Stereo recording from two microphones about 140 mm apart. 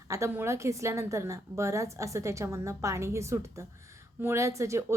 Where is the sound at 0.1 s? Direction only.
20° right (ahead or behind).